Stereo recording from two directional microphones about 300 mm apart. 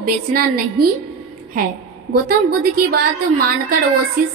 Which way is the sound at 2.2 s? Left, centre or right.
Right.